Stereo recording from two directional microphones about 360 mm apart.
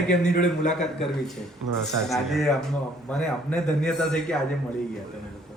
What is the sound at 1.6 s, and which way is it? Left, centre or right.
Speech, right.